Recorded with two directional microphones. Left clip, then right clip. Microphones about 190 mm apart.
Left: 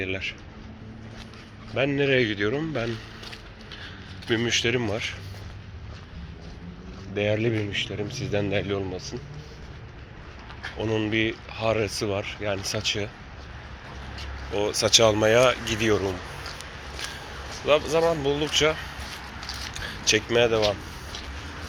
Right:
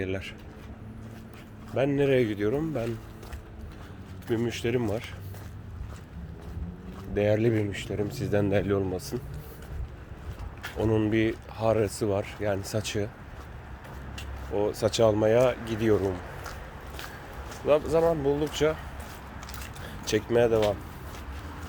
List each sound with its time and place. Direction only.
0.0 s speech: 35° right (ahead or behind)
1.7 s speech: 20° right (ahead or behind)
2.6 s speech: centre (ahead or behind)
4.3 s speech: 5° right (ahead or behind)
7.1 s speech: 35° right (ahead or behind); by 9.1 s 50° right (ahead or behind)
10.8 s speech: 30° right (ahead or behind)
14.8 s speech: 25° right (ahead or behind)
17.7 s speech: 30° right (ahead or behind)
19.7 s a sound: 15° right (ahead or behind)
20.1 s speech: 30° right (ahead or behind)